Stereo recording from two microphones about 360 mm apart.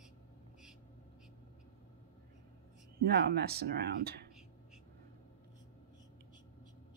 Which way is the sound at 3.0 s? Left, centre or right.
Right.